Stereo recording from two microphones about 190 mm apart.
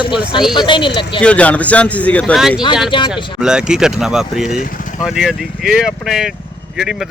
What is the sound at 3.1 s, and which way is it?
Speech, 25° left (ahead or behind).